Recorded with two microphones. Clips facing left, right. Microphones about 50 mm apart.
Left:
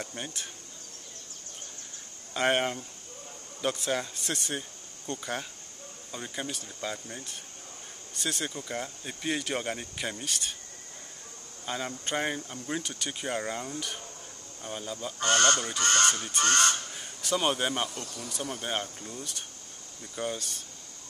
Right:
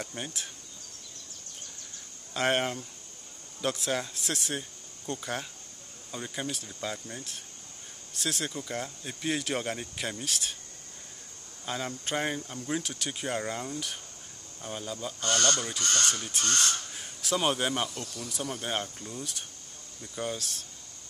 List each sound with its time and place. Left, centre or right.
0.0 s speech: centre
2.3 s speech: centre
11.6 s speech: centre
15.1 s speech: left
16.9 s speech: centre
18.0 s speech: left
18.3 s speech: centre